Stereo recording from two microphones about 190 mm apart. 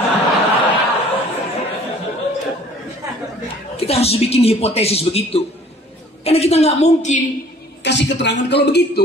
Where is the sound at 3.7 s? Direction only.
30° left (ahead or behind).